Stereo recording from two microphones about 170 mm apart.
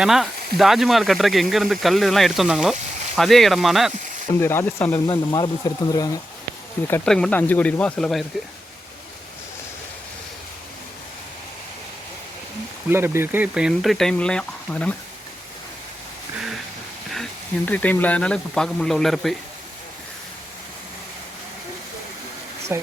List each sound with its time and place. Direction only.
0.0 s speech: centre (ahead or behind)
4.4 s speech: 15° left (ahead or behind)
5.0 s speech: 25° left (ahead or behind)
6.8 s speech: 15° left (ahead or behind)
12.9 s speech: 15° right (ahead or behind); by 14.9 s 10° left (ahead or behind)
17.7 s speech: 10° left (ahead or behind)
22.7 s speech: 15° right (ahead or behind)